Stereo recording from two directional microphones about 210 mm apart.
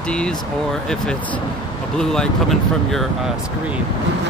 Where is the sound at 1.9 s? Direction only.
Centre (ahead or behind).